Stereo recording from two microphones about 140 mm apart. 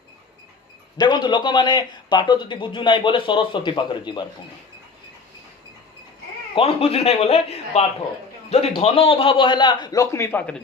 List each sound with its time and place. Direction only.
0.9 s speech: 30° left (ahead or behind)
6.5 s a man's voice: 45° left (ahead or behind); by 10.5 s 15° left (ahead or behind)